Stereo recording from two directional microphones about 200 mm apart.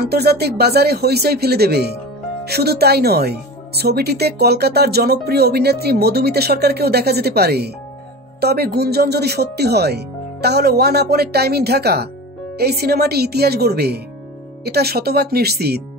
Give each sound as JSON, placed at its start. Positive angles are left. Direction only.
{"t": 0.0, "sound": "speech", "side_deg": -55}